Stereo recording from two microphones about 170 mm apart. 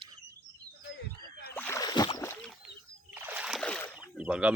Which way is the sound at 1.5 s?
15° left (ahead or behind).